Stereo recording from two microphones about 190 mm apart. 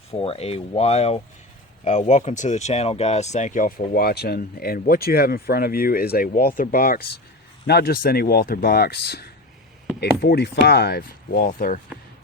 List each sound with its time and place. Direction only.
0.1 s speech: 30° left (ahead or behind); by 11.8 s 50° left (ahead or behind)